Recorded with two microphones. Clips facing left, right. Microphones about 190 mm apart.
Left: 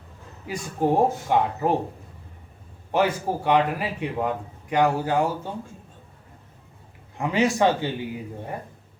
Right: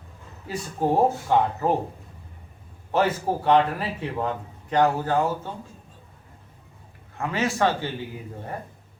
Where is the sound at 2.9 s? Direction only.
15° left (ahead or behind).